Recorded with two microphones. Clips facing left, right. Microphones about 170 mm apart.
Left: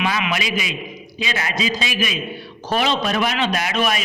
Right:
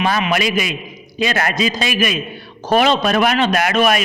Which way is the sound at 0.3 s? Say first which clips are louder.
Right 6 dB; 55° right (ahead or behind).